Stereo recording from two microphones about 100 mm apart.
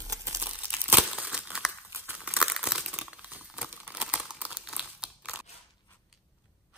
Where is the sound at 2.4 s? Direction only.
5° right (ahead or behind).